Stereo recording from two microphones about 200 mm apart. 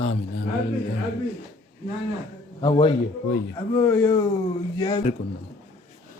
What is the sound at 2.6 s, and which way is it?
A man's voice, 25° left (ahead or behind).